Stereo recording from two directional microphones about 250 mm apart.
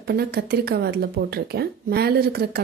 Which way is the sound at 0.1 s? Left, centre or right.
Right.